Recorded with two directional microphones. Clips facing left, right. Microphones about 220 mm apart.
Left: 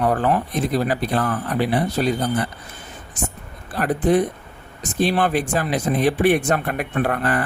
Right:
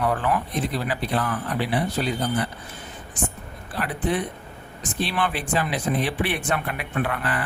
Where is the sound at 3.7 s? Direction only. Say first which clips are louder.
Left 7 dB; 45° left (ahead or behind).